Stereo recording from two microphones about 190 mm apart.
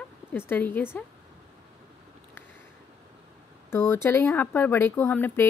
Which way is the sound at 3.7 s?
15° left (ahead or behind).